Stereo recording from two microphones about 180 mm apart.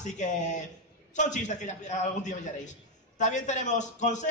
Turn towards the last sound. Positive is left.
turn(degrees=40)  # may be behind; listen again after turning